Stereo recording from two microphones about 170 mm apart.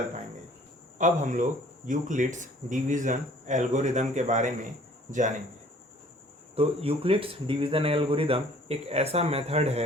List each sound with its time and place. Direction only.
0.9 s speech: 45° right (ahead or behind)
6.6 s speech: 35° right (ahead or behind)